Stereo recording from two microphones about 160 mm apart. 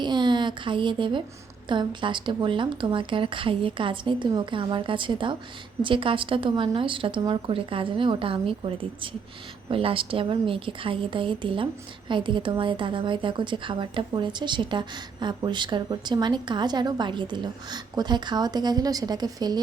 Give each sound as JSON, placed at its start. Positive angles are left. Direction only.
{"t": 0.0, "sound": "a woman's voice", "side_deg": -30}